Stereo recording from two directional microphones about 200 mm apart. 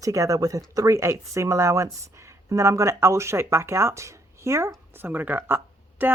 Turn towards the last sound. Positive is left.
turn(degrees=-10)  # may be behind; listen again after turning